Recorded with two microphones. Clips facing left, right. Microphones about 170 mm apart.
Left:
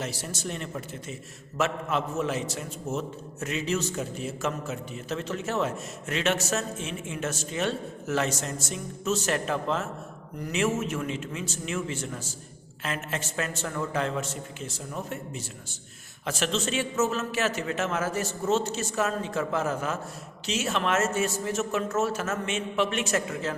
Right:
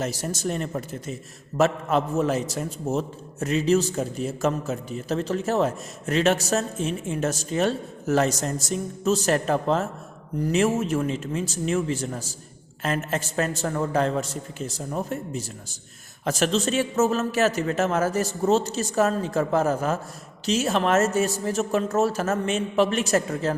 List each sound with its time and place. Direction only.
0.0 s a man's voice: 45° right (ahead or behind)